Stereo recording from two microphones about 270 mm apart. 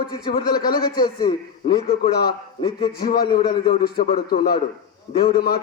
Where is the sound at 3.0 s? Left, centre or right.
Left.